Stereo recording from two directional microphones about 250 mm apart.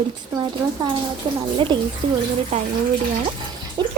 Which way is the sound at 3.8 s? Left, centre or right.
Centre.